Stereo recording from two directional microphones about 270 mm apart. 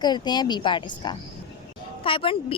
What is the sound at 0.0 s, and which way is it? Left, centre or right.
A woman's voice, centre.